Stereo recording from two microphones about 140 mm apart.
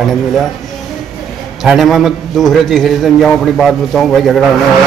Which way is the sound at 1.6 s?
Centre (ahead or behind).